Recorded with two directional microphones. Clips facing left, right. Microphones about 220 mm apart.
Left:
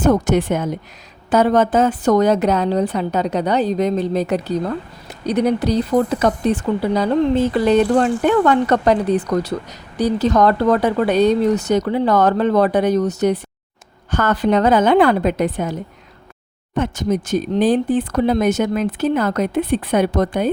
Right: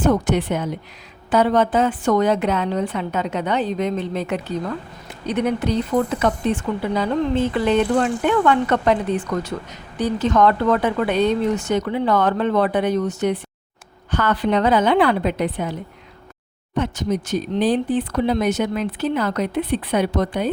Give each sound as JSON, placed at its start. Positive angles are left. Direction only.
{"t": 0.0, "sound": "speech", "side_deg": 45}